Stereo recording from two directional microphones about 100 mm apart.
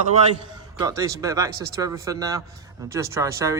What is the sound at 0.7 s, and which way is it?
A man's voice, 35° right (ahead or behind).